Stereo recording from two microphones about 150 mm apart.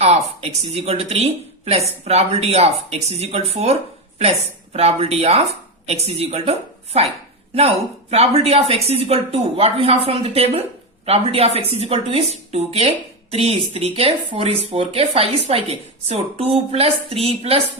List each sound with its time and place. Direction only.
0.6 s a woman's voice: 45° right (ahead or behind)
8.1 s a woman's voice: 45° right (ahead or behind)